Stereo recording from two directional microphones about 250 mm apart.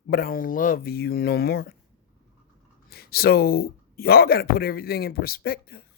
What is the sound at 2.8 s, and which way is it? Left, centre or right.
A man's voice, left.